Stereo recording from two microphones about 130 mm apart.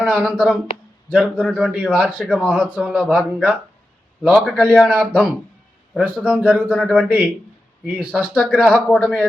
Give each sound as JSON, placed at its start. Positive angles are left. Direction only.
{"t": 0.0, "sound": "a man's voice", "side_deg": -5}
{"t": 6.7, "sound": "a man's voice", "side_deg": 5}
{"t": 6.9, "sound": "a man's voice", "side_deg": -10}
{"t": 8.7, "sound": "speech", "side_deg": 10}